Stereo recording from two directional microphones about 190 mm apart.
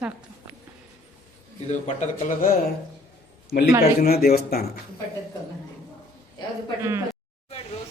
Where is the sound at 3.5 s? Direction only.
50° left (ahead or behind).